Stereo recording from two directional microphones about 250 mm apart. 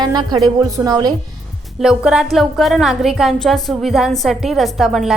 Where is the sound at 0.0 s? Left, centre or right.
Centre.